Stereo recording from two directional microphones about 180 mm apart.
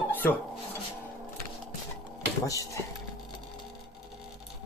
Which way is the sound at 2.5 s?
20° left (ahead or behind).